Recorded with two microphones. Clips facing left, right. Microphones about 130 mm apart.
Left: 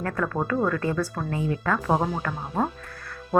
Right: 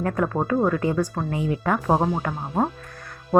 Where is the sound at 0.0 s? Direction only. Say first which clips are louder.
Right 3 dB; 20° right (ahead or behind).